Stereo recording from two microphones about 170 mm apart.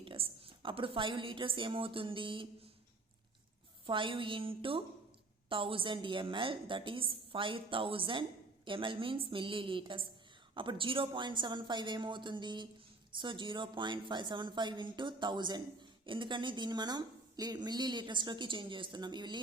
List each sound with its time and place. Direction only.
0.0 s a woman's voice: 30° right (ahead or behind)
3.8 s a woman's voice: 30° right (ahead or behind)